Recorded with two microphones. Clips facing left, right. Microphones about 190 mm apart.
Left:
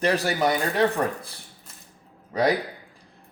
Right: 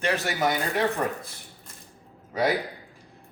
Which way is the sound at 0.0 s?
35° left (ahead or behind).